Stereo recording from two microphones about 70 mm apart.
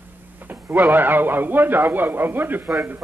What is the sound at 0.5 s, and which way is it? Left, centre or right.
A man's voice, right.